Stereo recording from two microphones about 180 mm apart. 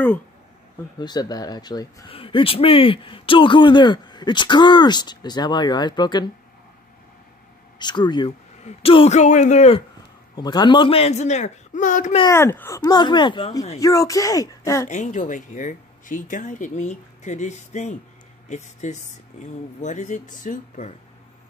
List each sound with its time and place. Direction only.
0.9 s speech: 25° left (ahead or behind)
7.8 s speech: 25° left (ahead or behind)
10.3 s speech: 25° left (ahead or behind); by 12.2 s 45° left (ahead or behind)
12.2 s speech: 15° left (ahead or behind)
14.9 s speech: 40° left (ahead or behind)